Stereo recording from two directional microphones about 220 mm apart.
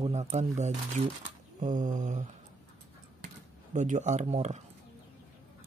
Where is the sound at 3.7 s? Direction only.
35° right (ahead or behind).